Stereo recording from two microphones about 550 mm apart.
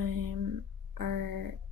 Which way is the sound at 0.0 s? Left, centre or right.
Right.